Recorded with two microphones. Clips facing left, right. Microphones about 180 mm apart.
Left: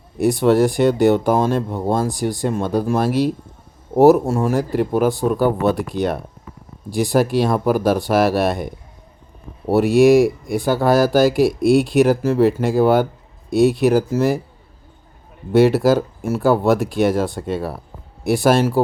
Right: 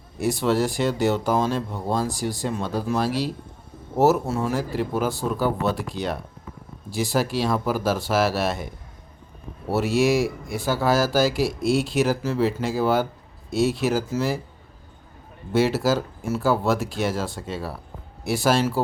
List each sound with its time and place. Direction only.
0.2 s speech: 55° left (ahead or behind)
9.7 s speech: 55° left (ahead or behind)
15.5 s speech: 55° left (ahead or behind)